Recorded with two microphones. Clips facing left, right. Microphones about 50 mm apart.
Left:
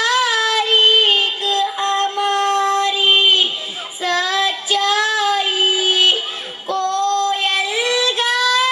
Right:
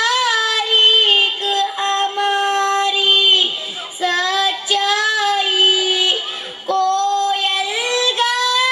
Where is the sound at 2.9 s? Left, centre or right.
Centre.